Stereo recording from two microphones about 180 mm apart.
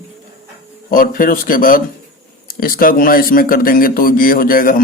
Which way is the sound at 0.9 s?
50° left (ahead or behind).